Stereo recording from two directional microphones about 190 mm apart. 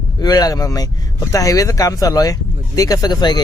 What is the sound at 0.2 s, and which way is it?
Speech, 20° left (ahead or behind).